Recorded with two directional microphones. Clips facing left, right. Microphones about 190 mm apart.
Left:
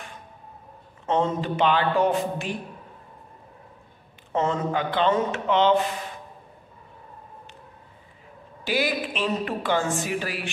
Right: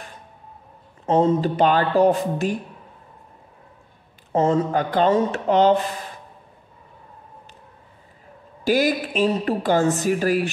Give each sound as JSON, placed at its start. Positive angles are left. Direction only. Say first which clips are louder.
{"t": 1.0, "sound": "a woman's voice", "louder": "right 6 dB", "side_deg": -35}
{"t": 4.3, "sound": "a woman's voice", "louder": "right 5 dB", "side_deg": -35}
{"t": 8.6, "sound": "a woman's voice", "louder": "right 6 dB", "side_deg": -45}